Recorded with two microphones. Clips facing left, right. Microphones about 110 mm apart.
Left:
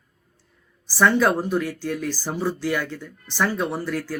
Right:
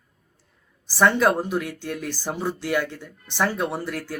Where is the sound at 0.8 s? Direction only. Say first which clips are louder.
Even; 15° right (ahead or behind).